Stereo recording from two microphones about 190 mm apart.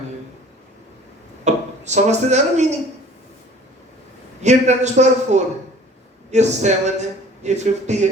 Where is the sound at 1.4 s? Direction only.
35° right (ahead or behind).